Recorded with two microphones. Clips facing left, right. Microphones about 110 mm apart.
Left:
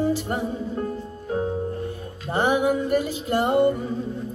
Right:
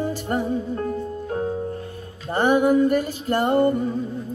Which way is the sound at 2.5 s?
45° right (ahead or behind).